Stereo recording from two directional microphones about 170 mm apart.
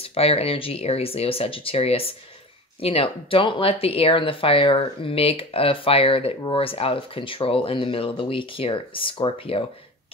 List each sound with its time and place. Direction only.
0.0 s speech: 35° left (ahead or behind)